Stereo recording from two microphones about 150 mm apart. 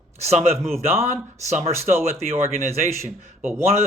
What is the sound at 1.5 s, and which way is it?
Speech, 50° right (ahead or behind).